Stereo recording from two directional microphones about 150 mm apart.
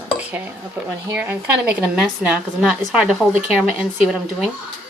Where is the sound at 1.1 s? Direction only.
15° right (ahead or behind).